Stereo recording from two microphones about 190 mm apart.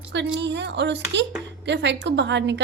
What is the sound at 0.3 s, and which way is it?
A woman's voice, 70° right (ahead or behind).